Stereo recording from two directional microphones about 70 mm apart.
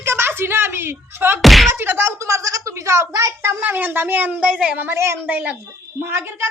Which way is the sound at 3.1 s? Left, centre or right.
Right.